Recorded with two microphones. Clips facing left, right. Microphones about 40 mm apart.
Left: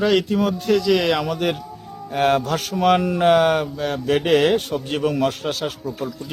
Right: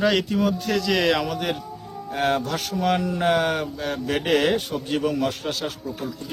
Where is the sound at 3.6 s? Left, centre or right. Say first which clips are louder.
Left 4 dB; centre.